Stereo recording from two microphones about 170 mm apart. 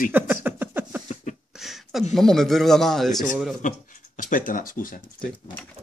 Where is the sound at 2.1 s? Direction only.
Centre (ahead or behind).